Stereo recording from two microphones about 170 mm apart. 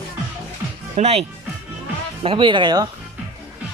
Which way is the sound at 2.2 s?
30° right (ahead or behind).